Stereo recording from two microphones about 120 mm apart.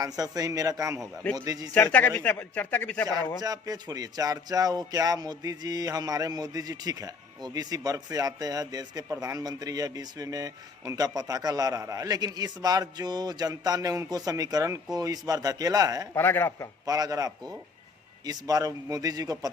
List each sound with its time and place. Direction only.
0.0 s a man's voice: 30° right (ahead or behind)
1.7 s speech: 15° left (ahead or behind)
3.4 s speech: 30° right (ahead or behind)
16.1 s speech: 15° left (ahead or behind)
16.8 s speech: 30° right (ahead or behind)